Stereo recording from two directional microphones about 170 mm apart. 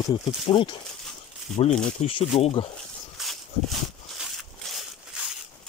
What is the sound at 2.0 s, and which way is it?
Speech, 35° left (ahead or behind).